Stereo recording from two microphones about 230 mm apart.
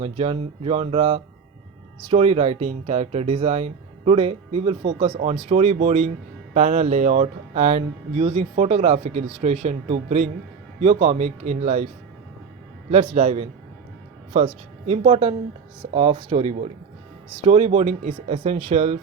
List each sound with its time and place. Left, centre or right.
0.0 s speech: right
12.9 s speech: right